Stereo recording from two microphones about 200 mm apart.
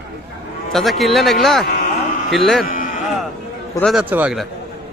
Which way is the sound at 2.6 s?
40° left (ahead or behind).